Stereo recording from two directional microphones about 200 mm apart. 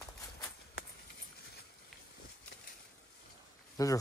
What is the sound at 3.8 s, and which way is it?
Speech, 15° left (ahead or behind).